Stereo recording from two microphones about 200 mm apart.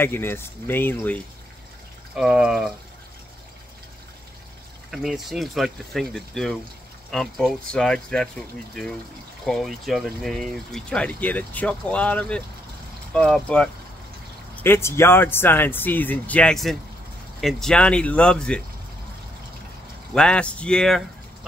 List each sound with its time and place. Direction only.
0.0 s speech: 10° left (ahead or behind)
2.1 s speech: 5° right (ahead or behind)
4.9 s speech: centre (ahead or behind)
20.2 s speech: 5° left (ahead or behind)